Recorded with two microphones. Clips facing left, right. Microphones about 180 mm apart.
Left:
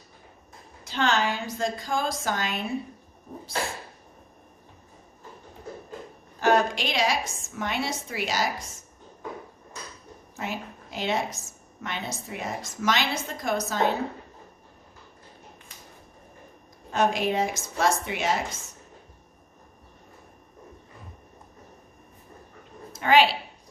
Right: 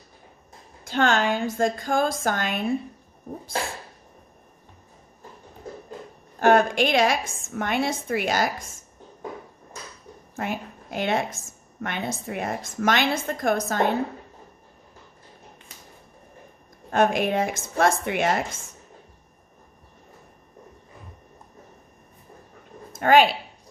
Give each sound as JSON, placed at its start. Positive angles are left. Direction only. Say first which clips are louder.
{"t": 0.9, "sound": "a woman's voice", "louder": "right 4 dB", "side_deg": -50}
{"t": 6.4, "sound": "a woman's voice", "louder": "right 4 dB", "side_deg": -50}
{"t": 10.3, "sound": "a woman's voice", "louder": "right 4 dB", "side_deg": -55}
{"t": 16.9, "sound": "a woman's voice", "louder": "right 3 dB", "side_deg": -55}
{"t": 22.9, "sound": "speech", "louder": "right 3 dB", "side_deg": -50}